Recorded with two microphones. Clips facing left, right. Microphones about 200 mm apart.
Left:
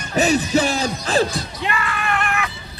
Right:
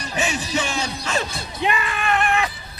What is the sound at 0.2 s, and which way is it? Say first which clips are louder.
Music: left 8 dB; 40° left (ahead or behind).